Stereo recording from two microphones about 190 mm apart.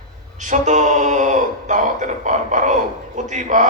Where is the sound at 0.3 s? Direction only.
40° right (ahead or behind).